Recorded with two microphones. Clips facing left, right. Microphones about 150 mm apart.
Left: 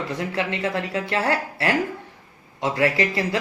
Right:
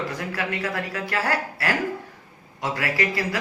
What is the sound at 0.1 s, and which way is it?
Speech, 25° left (ahead or behind).